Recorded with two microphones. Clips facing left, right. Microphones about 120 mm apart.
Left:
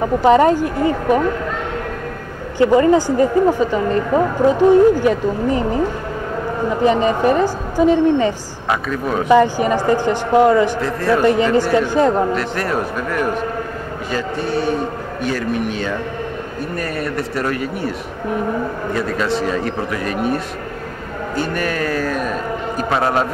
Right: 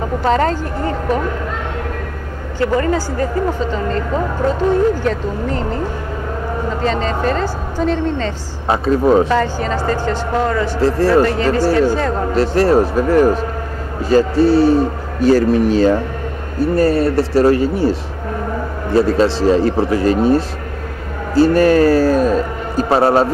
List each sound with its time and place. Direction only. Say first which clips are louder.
0.2 s speech: left 4 dB; 15° left (ahead or behind)
2.6 s speech: left 4 dB; 20° left (ahead or behind)
6.8 s speech: left 5 dB; 15° left (ahead or behind)
8.6 s a man's voice: right 7 dB; 30° right (ahead or behind)
9.3 s speech: left 4 dB; 15° left (ahead or behind)
10.8 s a man's voice: right 5 dB; 30° right (ahead or behind)
11.2 s speech: left 1 dB; 20° left (ahead or behind)
12.4 s a man's voice: right 8 dB; 30° right (ahead or behind)